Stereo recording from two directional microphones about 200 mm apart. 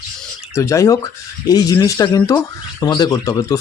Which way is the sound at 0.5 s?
15° left (ahead or behind).